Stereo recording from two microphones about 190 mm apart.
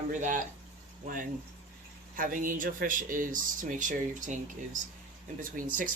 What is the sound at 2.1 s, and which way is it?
Speech, 45° right (ahead or behind).